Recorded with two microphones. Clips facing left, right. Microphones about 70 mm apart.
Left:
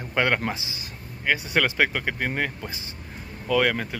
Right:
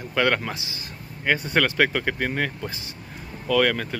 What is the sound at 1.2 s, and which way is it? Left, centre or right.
Speech, centre.